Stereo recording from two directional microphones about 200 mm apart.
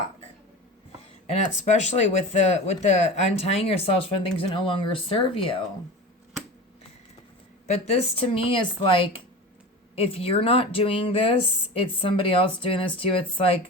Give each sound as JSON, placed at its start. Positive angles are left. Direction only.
{"t": 1.3, "sound": "speech", "side_deg": 35}
{"t": 7.7, "sound": "speech", "side_deg": 30}